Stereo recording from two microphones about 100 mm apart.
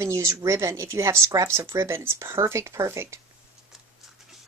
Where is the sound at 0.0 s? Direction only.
30° right (ahead or behind).